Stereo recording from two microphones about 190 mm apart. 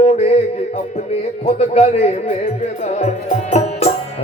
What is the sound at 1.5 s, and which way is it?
Speech, 30° left (ahead or behind).